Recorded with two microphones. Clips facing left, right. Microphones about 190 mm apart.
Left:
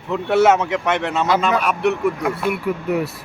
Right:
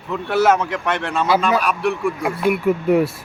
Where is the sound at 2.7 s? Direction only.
25° right (ahead or behind).